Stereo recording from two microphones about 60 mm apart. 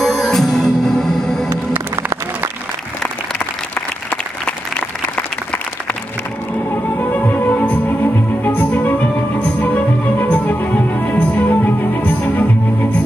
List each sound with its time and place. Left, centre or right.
0.0 s music: centre
7.0 s music: left